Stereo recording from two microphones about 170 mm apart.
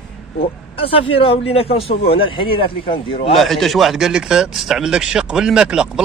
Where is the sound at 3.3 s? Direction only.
Centre (ahead or behind).